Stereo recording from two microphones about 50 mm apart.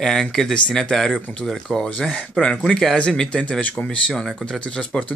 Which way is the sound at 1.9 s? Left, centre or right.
Left.